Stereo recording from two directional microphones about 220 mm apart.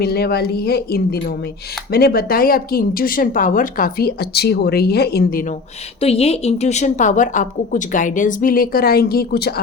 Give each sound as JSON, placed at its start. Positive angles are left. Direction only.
{"t": 0.0, "sound": "a woman's voice", "side_deg": 45}
{"t": 6.0, "sound": "a woman's voice", "side_deg": 25}